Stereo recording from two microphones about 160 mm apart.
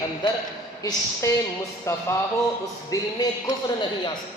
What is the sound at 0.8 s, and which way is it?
A man's voice, 20° left (ahead or behind).